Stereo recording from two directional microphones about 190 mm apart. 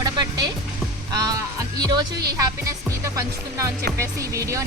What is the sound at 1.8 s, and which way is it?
Speech, 20° right (ahead or behind).